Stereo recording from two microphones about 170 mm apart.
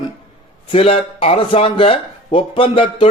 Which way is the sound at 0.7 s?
35° left (ahead or behind).